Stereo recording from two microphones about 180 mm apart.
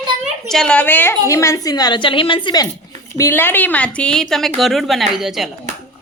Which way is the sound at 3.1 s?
15° left (ahead or behind).